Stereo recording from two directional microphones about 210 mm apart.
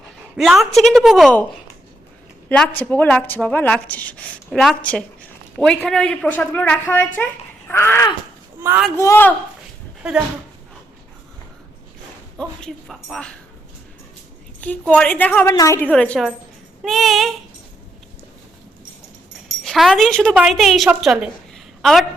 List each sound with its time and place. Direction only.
0.3 s a woman's voice: centre (ahead or behind)
2.5 s a woman's voice: 5° left (ahead or behind)
8.6 s a man's voice: 10° right (ahead or behind)
9.0 s speech: 10° left (ahead or behind)
10.0 s a woman's voice: 5° right (ahead or behind)
12.4 s a woman's voice: centre (ahead or behind)
14.6 s a woman's voice: 5° left (ahead or behind)
19.6 s a woman's voice: centre (ahead or behind)